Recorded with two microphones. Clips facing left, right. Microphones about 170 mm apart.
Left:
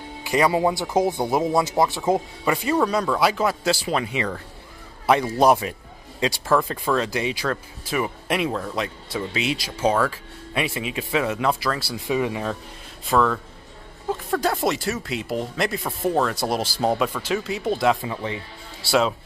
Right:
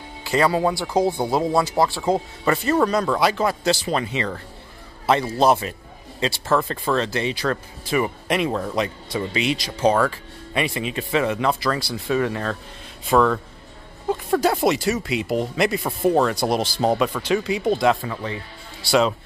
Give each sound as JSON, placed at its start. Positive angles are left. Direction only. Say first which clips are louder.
{"t": 0.2, "sound": "speech", "louder": "even", "side_deg": 15}
{"t": 13.1, "sound": "speech", "louder": "right 3 dB", "side_deg": 0}
{"t": 16.9, "sound": "speech", "louder": "right 3 dB", "side_deg": -5}
{"t": 18.0, "sound": "speech", "louder": "even", "side_deg": 20}
{"t": 18.8, "sound": "a man's voice", "louder": "right 2 dB", "side_deg": 5}